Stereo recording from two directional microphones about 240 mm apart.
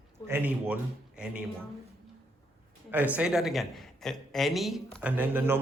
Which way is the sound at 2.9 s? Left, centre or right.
Centre.